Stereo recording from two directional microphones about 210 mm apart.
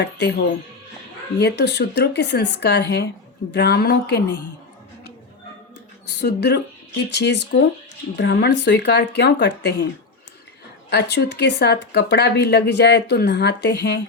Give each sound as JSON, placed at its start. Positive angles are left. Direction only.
{"t": 0.0, "sound": "speech", "side_deg": 55}
{"t": 6.1, "sound": "speech", "side_deg": 50}